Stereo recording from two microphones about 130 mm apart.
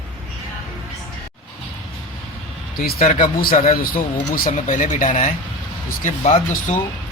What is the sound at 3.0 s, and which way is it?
A man's voice, 90° left.